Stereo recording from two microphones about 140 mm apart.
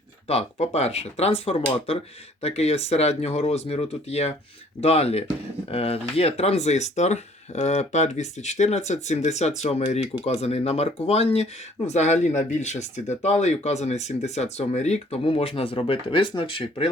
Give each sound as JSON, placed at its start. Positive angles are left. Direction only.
{"t": 0.3, "sound": "speech", "side_deg": 50}